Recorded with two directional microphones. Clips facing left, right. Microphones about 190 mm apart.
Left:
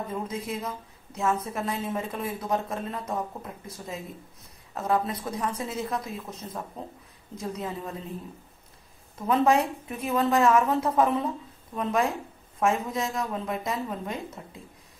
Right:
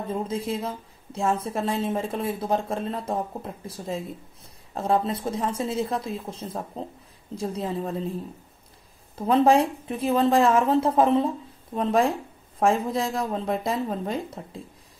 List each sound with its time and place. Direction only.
0.1 s a woman's voice: 30° right (ahead or behind)
9.2 s a woman's voice: 30° right (ahead or behind)